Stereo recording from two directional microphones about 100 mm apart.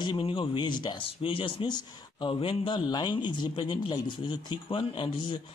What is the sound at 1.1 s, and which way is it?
Speech, 65° left (ahead or behind).